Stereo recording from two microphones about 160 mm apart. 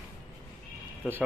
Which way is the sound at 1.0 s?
5° right (ahead or behind).